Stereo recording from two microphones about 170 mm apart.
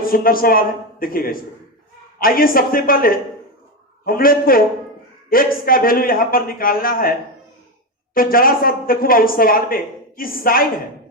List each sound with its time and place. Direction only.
0.0 s speech: 60° left (ahead or behind)